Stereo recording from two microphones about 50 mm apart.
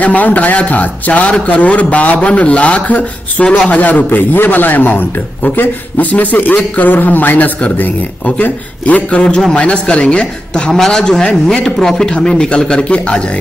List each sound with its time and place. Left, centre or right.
0.0 s a man's voice: left
10.7 s a man's voice: centre